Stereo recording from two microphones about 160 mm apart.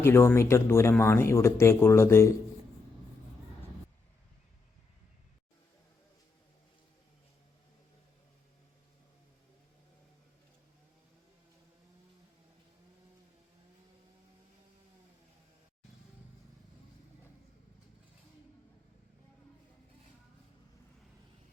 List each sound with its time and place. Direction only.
0.0 s speech: 15° left (ahead or behind)